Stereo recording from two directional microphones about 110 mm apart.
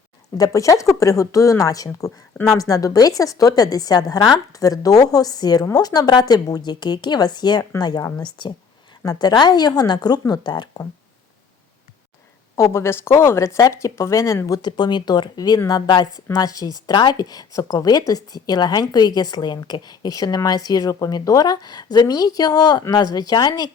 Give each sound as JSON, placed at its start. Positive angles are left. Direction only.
{"t": 0.3, "sound": "speech", "side_deg": 30}
{"t": 12.5, "sound": "speech", "side_deg": 25}